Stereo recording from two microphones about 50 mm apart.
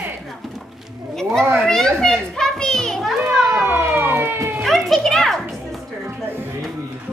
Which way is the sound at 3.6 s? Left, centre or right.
Right.